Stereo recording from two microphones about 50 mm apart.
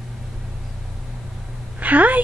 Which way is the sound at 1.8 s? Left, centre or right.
Right.